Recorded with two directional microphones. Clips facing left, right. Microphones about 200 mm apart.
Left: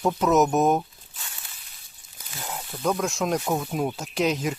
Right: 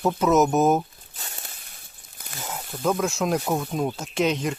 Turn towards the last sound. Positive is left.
turn(degrees=0)  # may be behind; listen again after turning